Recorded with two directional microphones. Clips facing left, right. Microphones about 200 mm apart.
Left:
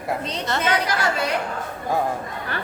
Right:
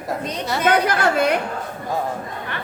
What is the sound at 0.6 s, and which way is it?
Speech, 55° right (ahead or behind).